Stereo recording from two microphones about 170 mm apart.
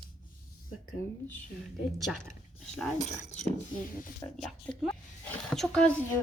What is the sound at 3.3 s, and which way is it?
Speech, 40° left (ahead or behind).